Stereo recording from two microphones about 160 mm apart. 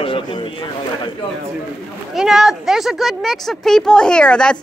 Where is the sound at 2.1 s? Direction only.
5° right (ahead or behind).